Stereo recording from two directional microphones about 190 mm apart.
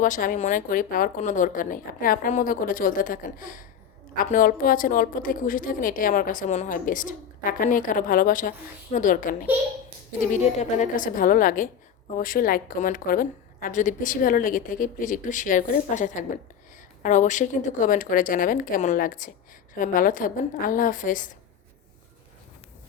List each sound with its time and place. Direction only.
0.0 s a woman's voice: 45° left (ahead or behind)
10.6 s a woman's voice: 40° left (ahead or behind)